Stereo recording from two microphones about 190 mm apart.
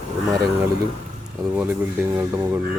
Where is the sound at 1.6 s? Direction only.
10° right (ahead or behind).